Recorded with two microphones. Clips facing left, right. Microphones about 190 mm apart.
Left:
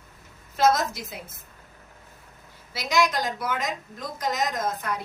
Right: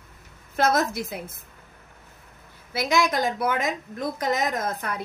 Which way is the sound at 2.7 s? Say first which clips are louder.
Right 1 dB; 55° right (ahead or behind).